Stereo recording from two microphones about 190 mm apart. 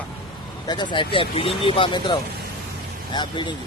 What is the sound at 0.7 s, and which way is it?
Speech, 25° left (ahead or behind).